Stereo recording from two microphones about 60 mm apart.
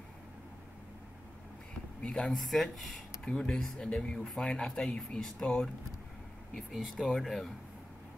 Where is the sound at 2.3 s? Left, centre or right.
Centre.